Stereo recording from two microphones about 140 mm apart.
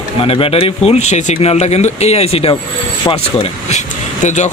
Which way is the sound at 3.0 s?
35° left (ahead or behind).